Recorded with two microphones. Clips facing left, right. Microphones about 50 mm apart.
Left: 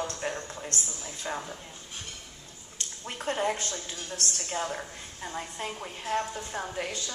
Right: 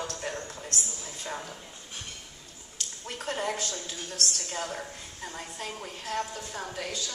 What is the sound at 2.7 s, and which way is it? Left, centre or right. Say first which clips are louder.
A woman's voice: even; left.